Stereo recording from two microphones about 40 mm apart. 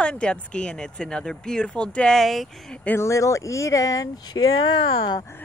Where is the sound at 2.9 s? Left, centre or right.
Left.